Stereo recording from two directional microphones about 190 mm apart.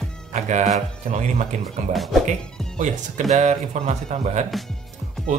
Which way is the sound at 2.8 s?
40° right (ahead or behind).